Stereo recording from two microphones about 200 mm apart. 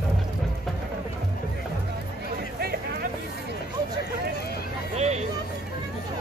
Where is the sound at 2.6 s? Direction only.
50° right (ahead or behind).